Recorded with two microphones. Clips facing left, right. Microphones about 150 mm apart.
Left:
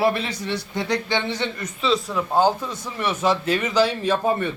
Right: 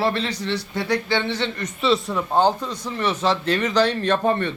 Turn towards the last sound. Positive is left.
turn(degrees=10)  # may be behind; listen again after turning